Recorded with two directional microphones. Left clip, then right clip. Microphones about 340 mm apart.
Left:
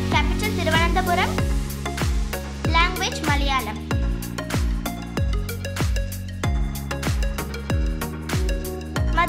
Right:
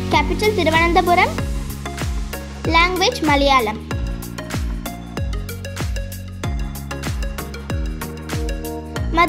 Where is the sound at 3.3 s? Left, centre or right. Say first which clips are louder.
Right 9 dB; centre.